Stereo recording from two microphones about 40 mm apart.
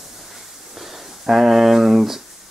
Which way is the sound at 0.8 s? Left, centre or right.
Centre.